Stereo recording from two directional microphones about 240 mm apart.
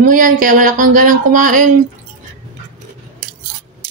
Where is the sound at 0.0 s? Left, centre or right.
Right.